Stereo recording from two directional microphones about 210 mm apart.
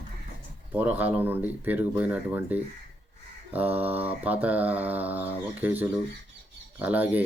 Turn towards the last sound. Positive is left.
turn(degrees=-10)  # may be behind; listen again after turning